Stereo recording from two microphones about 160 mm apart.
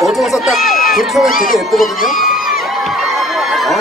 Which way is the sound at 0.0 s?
Centre (ahead or behind).